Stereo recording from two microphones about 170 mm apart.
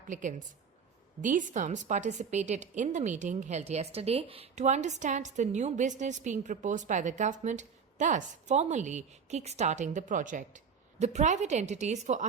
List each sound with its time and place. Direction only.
0.1 s a woman's voice: 50° right (ahead or behind)